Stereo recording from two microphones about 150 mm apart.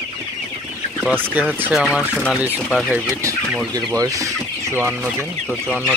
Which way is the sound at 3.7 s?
20° right (ahead or behind).